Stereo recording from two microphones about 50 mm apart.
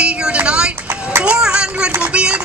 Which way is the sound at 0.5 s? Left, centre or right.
Right.